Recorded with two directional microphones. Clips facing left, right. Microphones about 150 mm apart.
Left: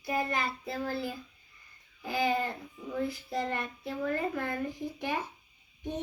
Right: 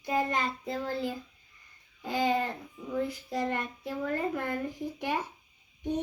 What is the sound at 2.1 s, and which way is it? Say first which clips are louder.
Child singing: right 2 dB; 20° right (ahead or behind).